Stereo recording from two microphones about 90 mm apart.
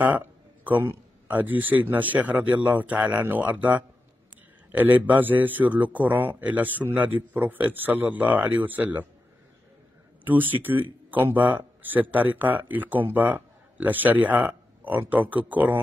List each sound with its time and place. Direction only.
0.0 s speech: 20° right (ahead or behind)
10.2 s speech: 20° right (ahead or behind)